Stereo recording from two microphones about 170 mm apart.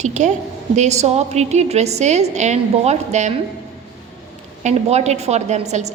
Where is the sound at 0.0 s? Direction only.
45° right (ahead or behind).